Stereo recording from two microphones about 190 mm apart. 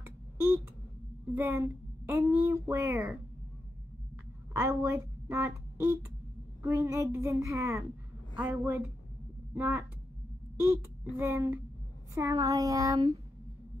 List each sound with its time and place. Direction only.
0.0 s a sound: 10° right (ahead or behind)
1.3 s a woman's voice: 15° right (ahead or behind)
4.6 s a woman's voice: 15° right (ahead or behind)
11.1 s a woman's voice: 15° right (ahead or behind)